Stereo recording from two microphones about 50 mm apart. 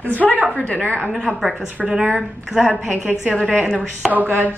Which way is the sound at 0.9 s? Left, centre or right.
Centre.